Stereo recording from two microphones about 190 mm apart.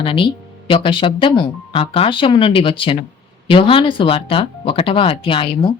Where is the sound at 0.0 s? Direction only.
25° left (ahead or behind).